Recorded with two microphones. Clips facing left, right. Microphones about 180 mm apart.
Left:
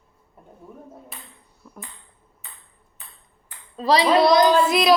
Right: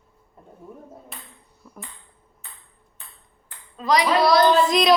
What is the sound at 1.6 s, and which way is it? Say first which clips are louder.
Ping: left 1 dB; centre (ahead or behind).